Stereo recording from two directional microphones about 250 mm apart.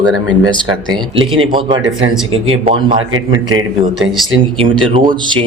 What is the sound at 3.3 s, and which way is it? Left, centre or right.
Speech, centre.